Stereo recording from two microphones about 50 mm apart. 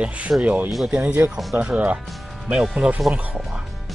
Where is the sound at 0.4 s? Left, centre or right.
Right.